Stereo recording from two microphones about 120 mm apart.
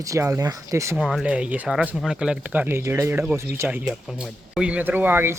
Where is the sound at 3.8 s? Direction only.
5° right (ahead or behind).